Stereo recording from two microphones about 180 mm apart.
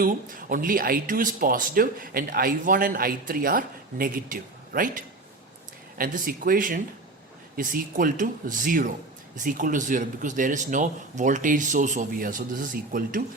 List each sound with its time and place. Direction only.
0.0 s speech: 50° right (ahead or behind)